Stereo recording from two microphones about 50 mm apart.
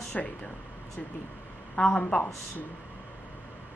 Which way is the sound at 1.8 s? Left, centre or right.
Left.